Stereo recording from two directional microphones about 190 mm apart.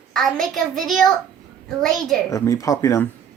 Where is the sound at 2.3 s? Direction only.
15° left (ahead or behind).